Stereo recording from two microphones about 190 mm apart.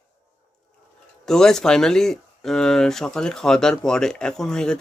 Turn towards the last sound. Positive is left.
turn(degrees=5)  # may be behind; listen again after turning